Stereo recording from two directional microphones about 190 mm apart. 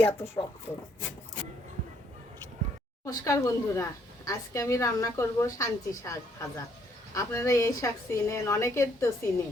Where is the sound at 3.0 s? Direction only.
15° left (ahead or behind).